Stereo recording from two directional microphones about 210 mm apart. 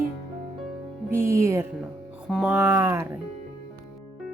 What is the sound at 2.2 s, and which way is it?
Speech, 5° right (ahead or behind).